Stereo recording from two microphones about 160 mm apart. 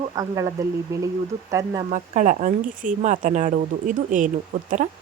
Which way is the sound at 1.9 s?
55° right (ahead or behind).